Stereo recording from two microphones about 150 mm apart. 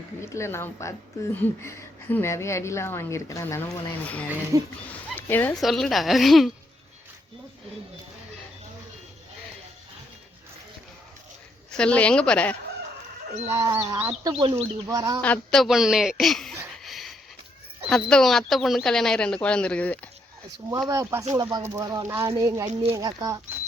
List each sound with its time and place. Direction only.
0.2 s speech: 20° left (ahead or behind)
5.5 s speech: centre (ahead or behind)
11.8 s speech: 5° left (ahead or behind)
13.5 s speech: 20° right (ahead or behind)
14.3 s speech: 35° right (ahead or behind)
14.8 s speech: 25° right (ahead or behind)
15.2 s speech: 5° left (ahead or behind)
16.7 s a sound: centre (ahead or behind)
17.8 s speech: 5° left (ahead or behind)
20.7 s speech: 20° right (ahead or behind)